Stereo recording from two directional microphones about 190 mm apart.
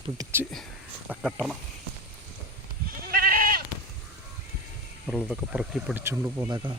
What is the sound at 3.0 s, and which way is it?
Goat, 50° right (ahead or behind).